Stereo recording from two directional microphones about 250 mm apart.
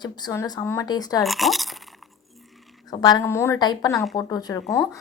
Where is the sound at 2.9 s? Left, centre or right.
Centre.